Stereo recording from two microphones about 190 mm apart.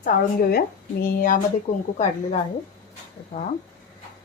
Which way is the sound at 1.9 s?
40° left (ahead or behind).